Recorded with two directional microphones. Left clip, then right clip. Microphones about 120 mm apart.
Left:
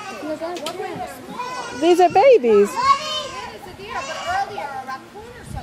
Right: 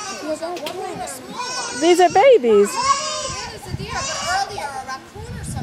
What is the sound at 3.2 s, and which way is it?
Children playing, 30° right (ahead or behind).